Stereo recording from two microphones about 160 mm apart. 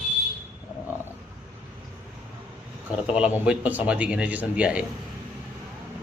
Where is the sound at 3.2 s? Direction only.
10° right (ahead or behind).